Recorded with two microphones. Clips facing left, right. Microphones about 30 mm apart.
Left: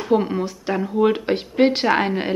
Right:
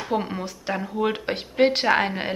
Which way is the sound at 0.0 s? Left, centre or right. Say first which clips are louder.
Left 7 dB; centre.